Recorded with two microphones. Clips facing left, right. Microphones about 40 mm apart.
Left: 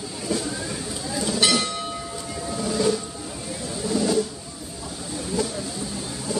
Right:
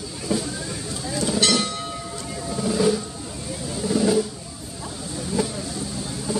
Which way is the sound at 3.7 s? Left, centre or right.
Centre.